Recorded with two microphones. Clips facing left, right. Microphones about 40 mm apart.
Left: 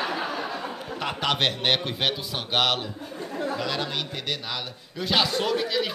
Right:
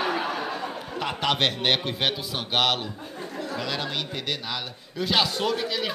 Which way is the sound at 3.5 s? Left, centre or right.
Centre.